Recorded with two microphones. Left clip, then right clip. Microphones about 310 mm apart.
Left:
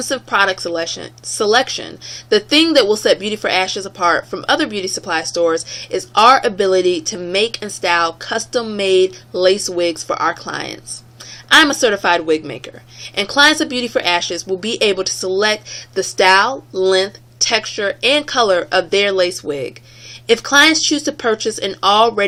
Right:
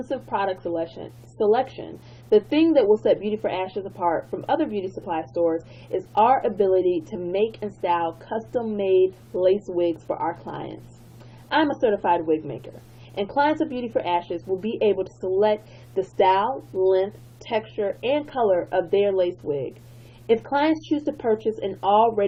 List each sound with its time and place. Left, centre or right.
0.1 s speech: left